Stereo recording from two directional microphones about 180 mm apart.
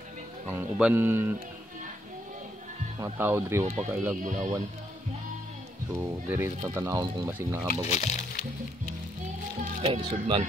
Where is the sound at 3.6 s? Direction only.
40° right (ahead or behind).